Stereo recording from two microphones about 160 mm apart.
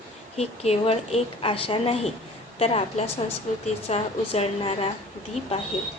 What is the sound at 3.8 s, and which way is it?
A woman's voice, 40° left (ahead or behind).